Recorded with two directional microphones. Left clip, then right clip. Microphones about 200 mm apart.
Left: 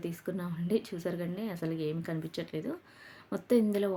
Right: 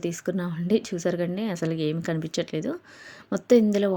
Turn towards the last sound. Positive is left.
turn(degrees=-30)  # may be behind; listen again after turning